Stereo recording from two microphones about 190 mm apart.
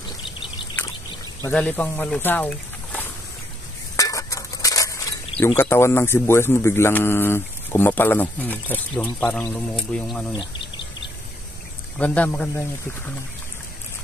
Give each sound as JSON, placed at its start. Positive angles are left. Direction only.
{"t": 1.4, "sound": "speech", "side_deg": 10}
{"t": 3.9, "sound": "cutlery", "side_deg": 15}
{"t": 5.4, "sound": "speech", "side_deg": 15}
{"t": 12.0, "sound": "speech", "side_deg": 10}